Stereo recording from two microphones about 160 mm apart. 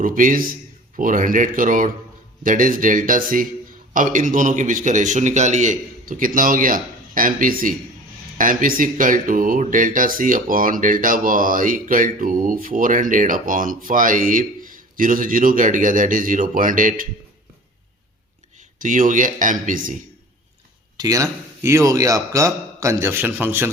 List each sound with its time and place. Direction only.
0.0 s speech: 55° right (ahead or behind)
18.8 s speech: 55° right (ahead or behind)
21.0 s speech: 20° right (ahead or behind)